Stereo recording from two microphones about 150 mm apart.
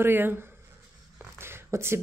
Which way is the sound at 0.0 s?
15° right (ahead or behind).